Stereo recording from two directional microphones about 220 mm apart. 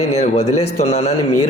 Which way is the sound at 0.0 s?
30° left (ahead or behind).